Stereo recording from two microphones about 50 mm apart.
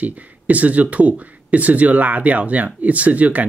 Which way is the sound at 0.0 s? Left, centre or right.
Right.